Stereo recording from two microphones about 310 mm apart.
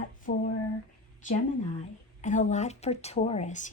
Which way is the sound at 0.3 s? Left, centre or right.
Left.